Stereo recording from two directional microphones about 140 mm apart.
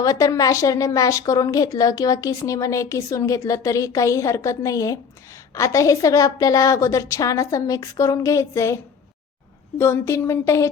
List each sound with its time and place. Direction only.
0.0 s speech: 25° left (ahead or behind)